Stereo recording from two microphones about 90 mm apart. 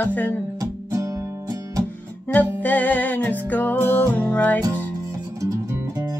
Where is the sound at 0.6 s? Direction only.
35° right (ahead or behind).